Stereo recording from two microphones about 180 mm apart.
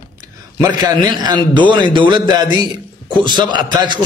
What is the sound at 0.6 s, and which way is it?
A man's voice, 20° right (ahead or behind).